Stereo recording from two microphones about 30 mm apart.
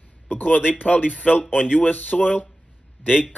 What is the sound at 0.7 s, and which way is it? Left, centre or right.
Speech, left.